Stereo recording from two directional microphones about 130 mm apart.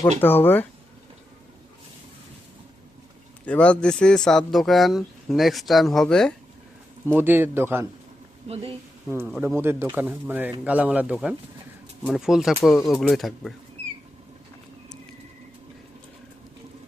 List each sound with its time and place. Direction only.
0.2 s speech: 15° left (ahead or behind)
3.4 s speech: 10° left (ahead or behind)
7.0 s speech: 15° right (ahead or behind)
9.6 s speech: 20° right (ahead or behind); by 13.5 s centre (ahead or behind)